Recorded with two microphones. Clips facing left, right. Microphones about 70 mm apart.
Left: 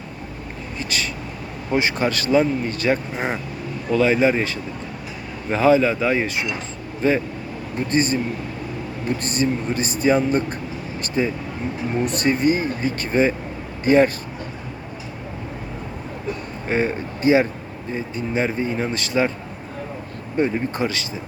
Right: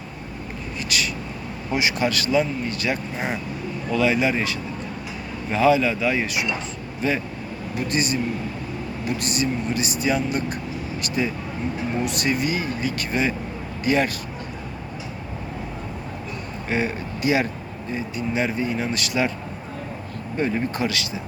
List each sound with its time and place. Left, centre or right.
0.8 s speech: left
7.8 s speech: left
16.6 s speech: left
20.4 s speech: left